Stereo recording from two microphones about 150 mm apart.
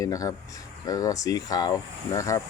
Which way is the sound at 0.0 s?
20° left (ahead or behind).